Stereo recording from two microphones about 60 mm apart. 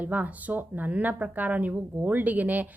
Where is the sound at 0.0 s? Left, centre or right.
Right.